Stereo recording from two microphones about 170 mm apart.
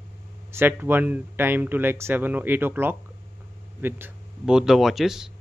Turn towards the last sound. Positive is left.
turn(degrees=0)  # may be behind; listen again after turning